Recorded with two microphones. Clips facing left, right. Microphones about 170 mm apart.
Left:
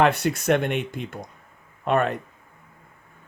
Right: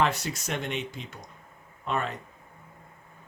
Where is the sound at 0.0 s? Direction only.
60° left (ahead or behind).